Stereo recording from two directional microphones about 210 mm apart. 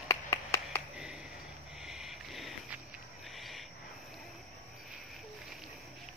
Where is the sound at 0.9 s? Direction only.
5° right (ahead or behind).